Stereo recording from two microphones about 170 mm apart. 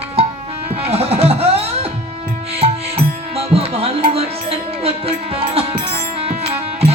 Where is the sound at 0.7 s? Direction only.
35° right (ahead or behind).